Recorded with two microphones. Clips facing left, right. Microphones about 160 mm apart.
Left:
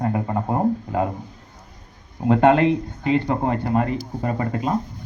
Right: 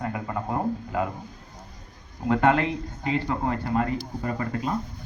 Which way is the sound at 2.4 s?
20° left (ahead or behind).